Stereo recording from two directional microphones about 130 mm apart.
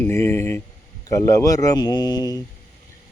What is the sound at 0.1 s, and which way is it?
Speech, 20° left (ahead or behind).